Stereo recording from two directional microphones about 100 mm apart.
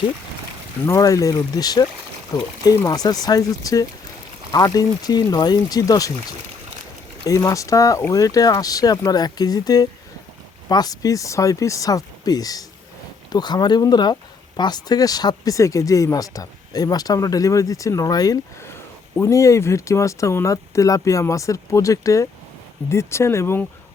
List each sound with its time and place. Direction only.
0.9 s speech: 35° left (ahead or behind)
7.3 s speech: 30° left (ahead or behind)